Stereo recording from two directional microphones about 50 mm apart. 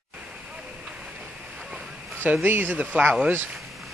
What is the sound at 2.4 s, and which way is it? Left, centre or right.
Speech, right.